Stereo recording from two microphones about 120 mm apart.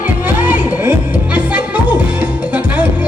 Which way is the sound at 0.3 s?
15° right (ahead or behind).